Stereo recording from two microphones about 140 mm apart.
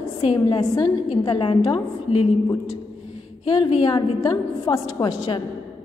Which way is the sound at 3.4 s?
30° left (ahead or behind).